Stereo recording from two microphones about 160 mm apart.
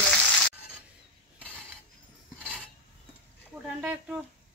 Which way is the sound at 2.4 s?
5° left (ahead or behind).